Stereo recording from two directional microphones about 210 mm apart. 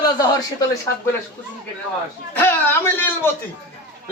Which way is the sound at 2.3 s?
10° left (ahead or behind).